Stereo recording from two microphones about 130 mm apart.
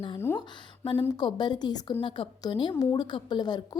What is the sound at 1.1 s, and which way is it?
A woman's voice, 35° left (ahead or behind).